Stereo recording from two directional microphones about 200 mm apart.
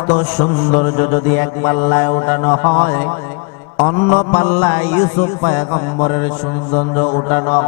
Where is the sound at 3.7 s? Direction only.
30° left (ahead or behind).